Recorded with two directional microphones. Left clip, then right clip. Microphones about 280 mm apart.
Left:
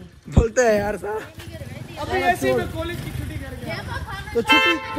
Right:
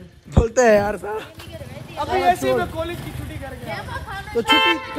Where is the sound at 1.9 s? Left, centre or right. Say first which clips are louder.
Right 3 dB; centre; by 4.1 s right.